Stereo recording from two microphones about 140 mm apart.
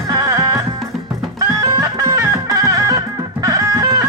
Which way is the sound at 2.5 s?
25° right (ahead or behind).